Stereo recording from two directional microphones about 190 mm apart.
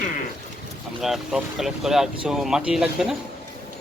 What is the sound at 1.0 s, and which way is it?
Speech, centre (ahead or behind).